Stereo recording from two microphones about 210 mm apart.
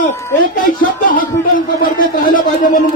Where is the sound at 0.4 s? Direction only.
40° left (ahead or behind).